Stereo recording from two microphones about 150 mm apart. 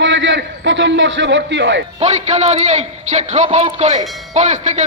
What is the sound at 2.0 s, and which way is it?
A man's voice, 50° right (ahead or behind).